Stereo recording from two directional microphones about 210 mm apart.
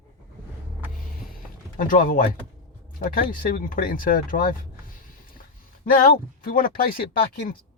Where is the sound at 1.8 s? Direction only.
40° left (ahead or behind).